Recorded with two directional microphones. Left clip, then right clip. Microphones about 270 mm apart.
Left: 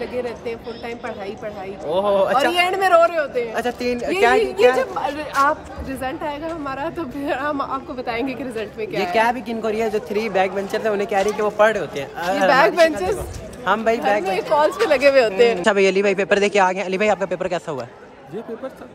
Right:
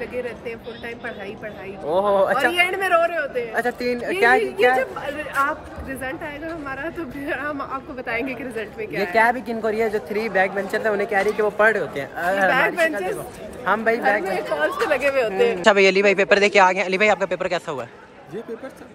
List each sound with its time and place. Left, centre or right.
0.0 s speech: centre
1.9 s speech: centre
2.5 s speech: centre
3.5 s speech: centre
4.7 s speech: centre
9.1 s speech: centre
12.4 s speech: left
13.7 s speech: centre
14.6 s speech: left
15.6 s speech: centre